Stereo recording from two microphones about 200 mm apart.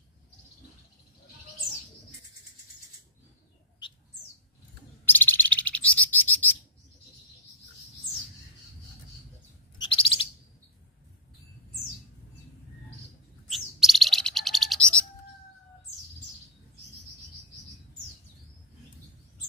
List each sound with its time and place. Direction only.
5.0 s chirp: 10° left (ahead or behind)
9.8 s chirp: 25° left (ahead or behind)
13.5 s bird: centre (ahead or behind)